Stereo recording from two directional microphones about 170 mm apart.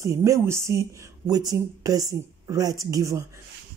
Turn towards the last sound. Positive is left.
turn(degrees=-20)  # may be behind; listen again after turning